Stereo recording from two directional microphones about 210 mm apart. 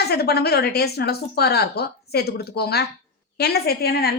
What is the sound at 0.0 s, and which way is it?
A woman's voice, 50° left (ahead or behind).